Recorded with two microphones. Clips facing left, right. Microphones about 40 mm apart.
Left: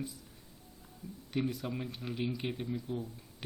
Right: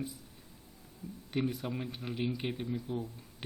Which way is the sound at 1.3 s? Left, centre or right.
Centre.